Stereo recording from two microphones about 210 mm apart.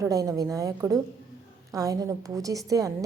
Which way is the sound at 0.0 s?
15° right (ahead or behind).